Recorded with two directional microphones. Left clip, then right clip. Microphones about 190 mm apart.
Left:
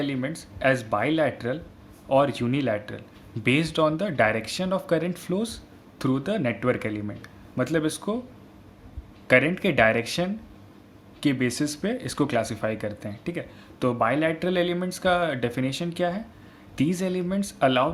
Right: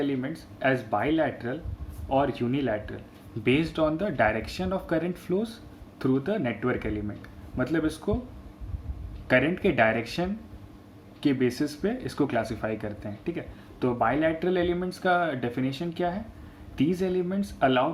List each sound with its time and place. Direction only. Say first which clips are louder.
0.0 s speech: left 1 dB; 35° left (ahead or behind)
9.2 s speech: left 3 dB; 30° left (ahead or behind)